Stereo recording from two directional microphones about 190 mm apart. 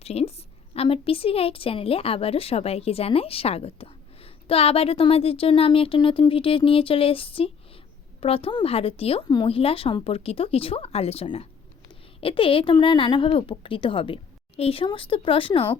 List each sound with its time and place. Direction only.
0.0 s a woman's voice: 30° left (ahead or behind)